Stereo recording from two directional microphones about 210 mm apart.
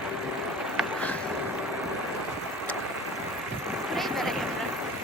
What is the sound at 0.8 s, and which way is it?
Vehicle, centre (ahead or behind).